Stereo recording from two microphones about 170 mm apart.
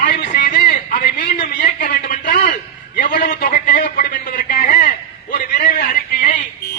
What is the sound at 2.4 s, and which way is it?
A man's voice, 55° left (ahead or behind).